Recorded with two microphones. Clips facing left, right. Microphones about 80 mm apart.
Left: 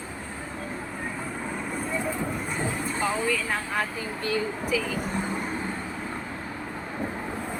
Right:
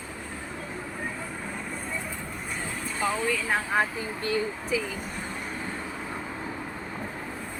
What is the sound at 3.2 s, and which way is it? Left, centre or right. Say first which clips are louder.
Speech: even; centre.